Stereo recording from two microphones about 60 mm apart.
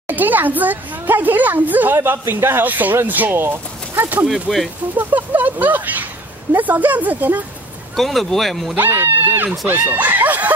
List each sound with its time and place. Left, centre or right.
0.1 s a child's voice: right
4.3 s speech: centre
4.9 s speech: right
7.9 s speech: centre
8.7 s a child's voice: right